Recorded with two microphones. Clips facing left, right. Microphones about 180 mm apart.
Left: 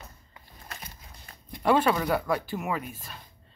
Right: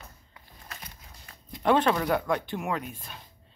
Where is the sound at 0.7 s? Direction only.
35° left (ahead or behind).